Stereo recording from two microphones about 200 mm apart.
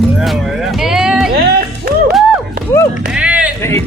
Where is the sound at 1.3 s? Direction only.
55° right (ahead or behind).